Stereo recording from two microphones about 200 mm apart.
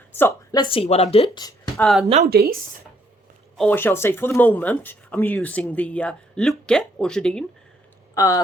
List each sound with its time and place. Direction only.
0.1 s speech: 10° left (ahead or behind)
1.7 s speech: centre (ahead or behind)
2.2 s speech: 50° right (ahead or behind)
3.6 s speech: 10° left (ahead or behind)
8.1 s speech: 15° left (ahead or behind)